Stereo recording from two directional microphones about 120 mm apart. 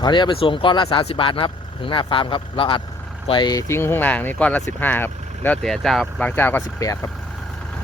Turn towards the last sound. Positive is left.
turn(degrees=30)  # may be behind; listen again after turning